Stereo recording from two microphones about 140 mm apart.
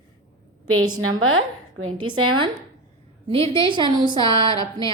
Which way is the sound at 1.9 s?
35° right (ahead or behind).